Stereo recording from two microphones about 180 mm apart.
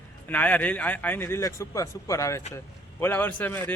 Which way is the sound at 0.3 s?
10° left (ahead or behind).